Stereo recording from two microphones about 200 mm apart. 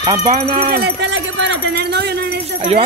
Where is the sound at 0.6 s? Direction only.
50° right (ahead or behind).